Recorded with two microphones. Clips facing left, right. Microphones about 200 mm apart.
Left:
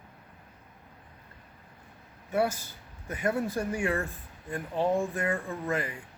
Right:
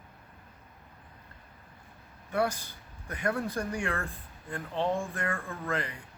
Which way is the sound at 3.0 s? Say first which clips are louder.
Left 2 dB; 20° left (ahead or behind).